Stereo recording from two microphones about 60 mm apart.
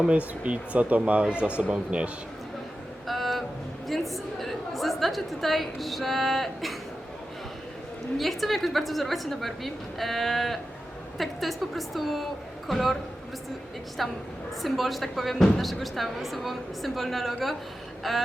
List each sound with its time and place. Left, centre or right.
0.1 s speech: right
3.1 s music: centre
3.8 s a woman's voice: centre
8.2 s speech: centre
14.0 s speech: centre